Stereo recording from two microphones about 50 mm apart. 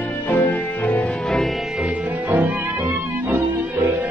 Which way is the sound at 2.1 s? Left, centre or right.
Right.